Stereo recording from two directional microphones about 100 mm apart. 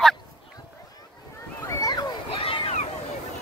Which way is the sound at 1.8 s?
40° left (ahead or behind).